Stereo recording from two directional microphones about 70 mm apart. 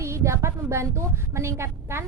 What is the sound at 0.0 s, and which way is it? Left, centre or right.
A woman's voice, right.